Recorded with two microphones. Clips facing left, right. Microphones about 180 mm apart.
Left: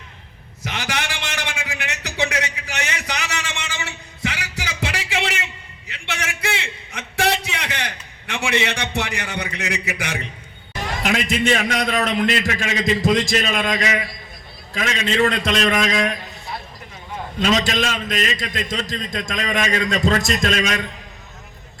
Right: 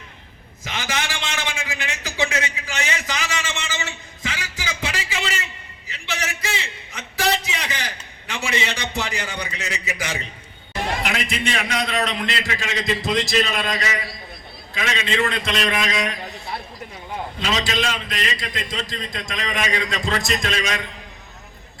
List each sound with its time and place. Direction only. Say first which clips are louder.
0.6 s a sound: left 1 dB; 65° left (ahead or behind)
11.0 s a man's voice: left 5 dB; 45° left (ahead or behind)
17.4 s a man's voice: left 5 dB; 50° left (ahead or behind)